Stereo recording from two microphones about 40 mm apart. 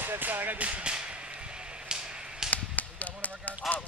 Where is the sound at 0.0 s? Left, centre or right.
Right.